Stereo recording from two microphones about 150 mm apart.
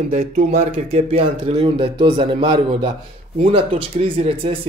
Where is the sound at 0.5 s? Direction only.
45° right (ahead or behind).